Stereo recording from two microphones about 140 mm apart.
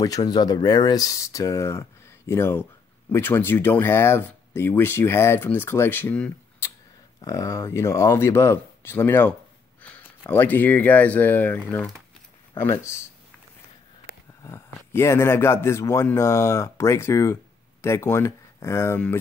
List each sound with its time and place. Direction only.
0.0 s speech: 25° left (ahead or behind); by 6.3 s 10° left (ahead or behind)
7.2 s speech: 25° left (ahead or behind)
10.3 s speech: 15° left (ahead or behind)
14.0 s a man's voice: 20° left (ahead or behind)